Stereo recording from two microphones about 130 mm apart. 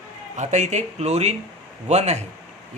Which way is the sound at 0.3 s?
65° right (ahead or behind).